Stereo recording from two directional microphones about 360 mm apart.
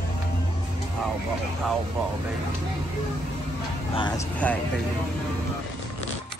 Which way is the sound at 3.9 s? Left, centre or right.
Centre.